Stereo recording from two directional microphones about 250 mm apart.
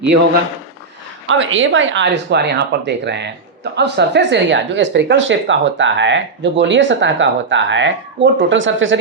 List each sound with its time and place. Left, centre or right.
1.3 s speech: right